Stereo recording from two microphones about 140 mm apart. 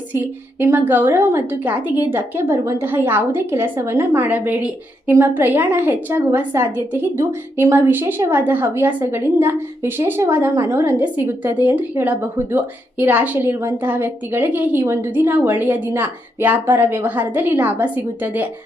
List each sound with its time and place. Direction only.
0.1 s a woman's voice: 15° right (ahead or behind)